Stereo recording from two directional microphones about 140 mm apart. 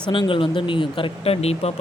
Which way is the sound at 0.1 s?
35° left (ahead or behind).